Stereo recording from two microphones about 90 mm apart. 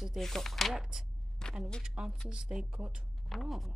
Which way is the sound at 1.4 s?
10° left (ahead or behind).